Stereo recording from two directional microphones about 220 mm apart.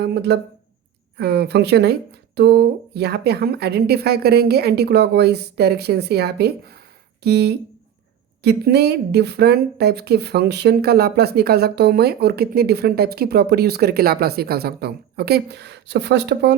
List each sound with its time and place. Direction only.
0.0 s speech: 50° right (ahead or behind)